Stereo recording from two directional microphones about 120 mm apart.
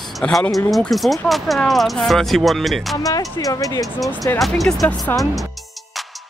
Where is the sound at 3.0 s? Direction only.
30° left (ahead or behind).